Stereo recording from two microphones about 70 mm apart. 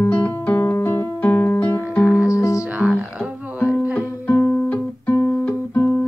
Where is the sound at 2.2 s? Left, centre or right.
Left.